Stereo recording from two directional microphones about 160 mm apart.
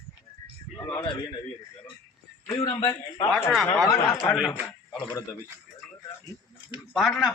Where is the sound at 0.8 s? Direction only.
25° left (ahead or behind).